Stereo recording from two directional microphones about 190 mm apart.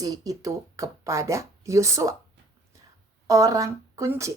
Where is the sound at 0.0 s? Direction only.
20° right (ahead or behind).